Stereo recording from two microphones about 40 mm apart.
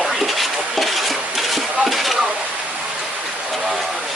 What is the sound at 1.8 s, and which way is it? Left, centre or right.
Speech, centre.